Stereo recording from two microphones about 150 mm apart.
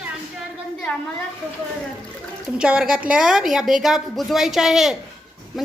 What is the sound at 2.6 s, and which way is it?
A woman's voice, 5° right (ahead or behind).